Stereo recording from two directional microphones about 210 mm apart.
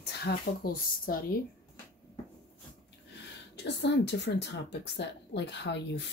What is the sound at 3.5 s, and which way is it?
Speech, 55° left (ahead or behind).